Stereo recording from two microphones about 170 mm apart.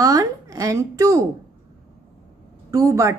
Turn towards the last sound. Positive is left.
turn(degrees=-15)  # may be behind; listen again after turning